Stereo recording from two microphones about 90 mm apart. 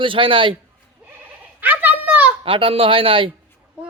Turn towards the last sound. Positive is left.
turn(degrees=-85)